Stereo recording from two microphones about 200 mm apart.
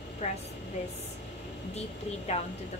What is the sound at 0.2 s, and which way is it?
Speech, 35° left (ahead or behind).